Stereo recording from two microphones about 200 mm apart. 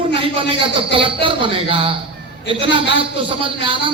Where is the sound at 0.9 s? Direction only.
25° right (ahead or behind).